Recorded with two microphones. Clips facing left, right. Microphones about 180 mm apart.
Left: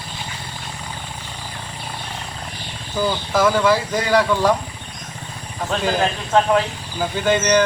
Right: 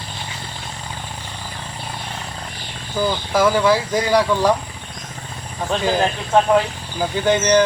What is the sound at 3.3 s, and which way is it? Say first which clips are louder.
Speech: right 1 dB; 10° right (ahead or behind).